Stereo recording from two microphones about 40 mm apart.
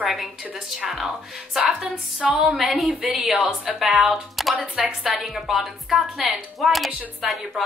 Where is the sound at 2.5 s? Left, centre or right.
Centre.